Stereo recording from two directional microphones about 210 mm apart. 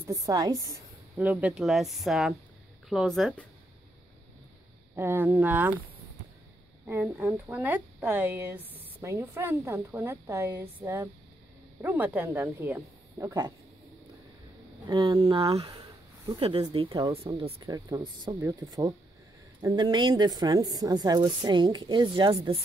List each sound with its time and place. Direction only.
0.0 s a woman's voice: 15° right (ahead or behind)
1.2 s speech: 5° right (ahead or behind)
4.9 s a woman's voice: 10° right (ahead or behind)
6.9 s a woman's voice: 10° right (ahead or behind)
14.9 s a woman's voice: 20° right (ahead or behind)